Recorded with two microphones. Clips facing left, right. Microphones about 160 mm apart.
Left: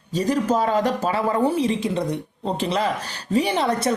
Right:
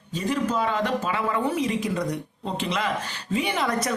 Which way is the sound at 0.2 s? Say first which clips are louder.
Left 5 dB; 40° left (ahead or behind).